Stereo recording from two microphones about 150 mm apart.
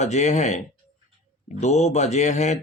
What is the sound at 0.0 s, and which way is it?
Speech, 50° left (ahead or behind).